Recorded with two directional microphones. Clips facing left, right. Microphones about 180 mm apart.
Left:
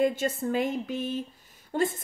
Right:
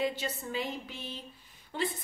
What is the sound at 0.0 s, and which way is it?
A woman's voice, 50° left (ahead or behind).